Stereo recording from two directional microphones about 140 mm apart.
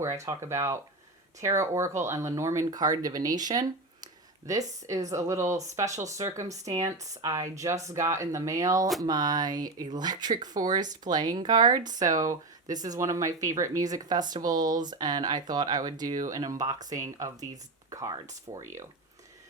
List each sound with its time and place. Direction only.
0.0 s speech: 20° right (ahead or behind)